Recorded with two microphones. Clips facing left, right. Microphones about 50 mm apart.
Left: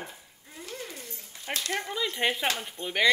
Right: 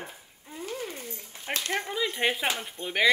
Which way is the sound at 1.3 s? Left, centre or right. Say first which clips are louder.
Right 1 dB; right.